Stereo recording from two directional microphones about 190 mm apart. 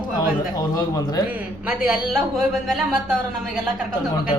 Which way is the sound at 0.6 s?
20° left (ahead or behind).